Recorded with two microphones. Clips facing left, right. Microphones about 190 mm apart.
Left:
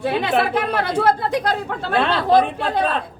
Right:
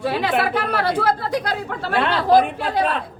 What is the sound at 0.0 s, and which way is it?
A man's voice, 25° left (ahead or behind).